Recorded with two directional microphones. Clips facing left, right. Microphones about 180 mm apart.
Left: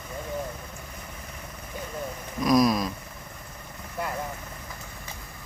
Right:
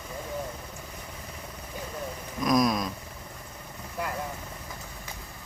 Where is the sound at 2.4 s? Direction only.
5° left (ahead or behind).